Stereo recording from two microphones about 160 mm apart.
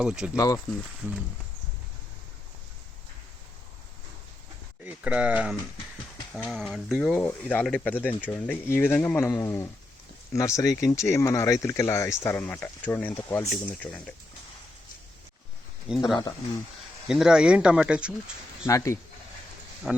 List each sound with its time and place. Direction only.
0.0 s speech: 5° right (ahead or behind)
0.3 s speech: 20° left (ahead or behind)
4.8 s speech: 10° right (ahead or behind)
15.9 s speech: 5° right (ahead or behind)
17.1 s speech: 5° right (ahead or behind)
18.6 s speech: 20° left (ahead or behind)
19.9 s speech: 5° right (ahead or behind)